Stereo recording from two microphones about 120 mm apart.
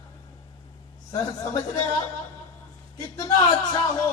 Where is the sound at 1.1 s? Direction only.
30° left (ahead or behind).